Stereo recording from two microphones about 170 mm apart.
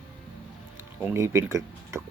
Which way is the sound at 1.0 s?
15° right (ahead or behind).